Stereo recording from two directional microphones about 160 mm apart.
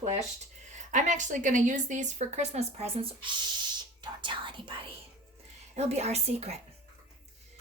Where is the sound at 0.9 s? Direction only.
50° right (ahead or behind); by 4.8 s 30° right (ahead or behind).